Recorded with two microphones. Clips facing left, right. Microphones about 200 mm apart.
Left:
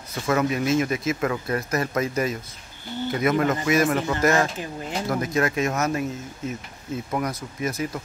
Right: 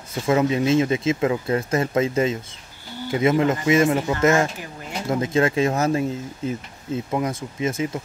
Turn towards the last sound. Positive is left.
turn(degrees=-25)  # may be behind; listen again after turning